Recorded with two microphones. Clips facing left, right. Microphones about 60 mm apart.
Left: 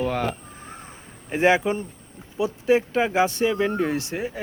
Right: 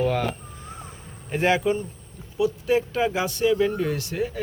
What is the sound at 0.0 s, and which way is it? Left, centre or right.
Speech, centre.